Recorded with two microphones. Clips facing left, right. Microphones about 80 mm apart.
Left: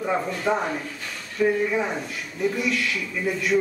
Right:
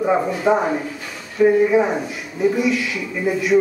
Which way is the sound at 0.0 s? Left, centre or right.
Centre.